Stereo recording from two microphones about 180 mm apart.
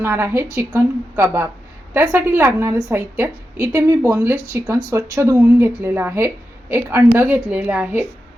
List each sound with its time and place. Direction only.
0.0 s a woman's voice: 15° right (ahead or behind)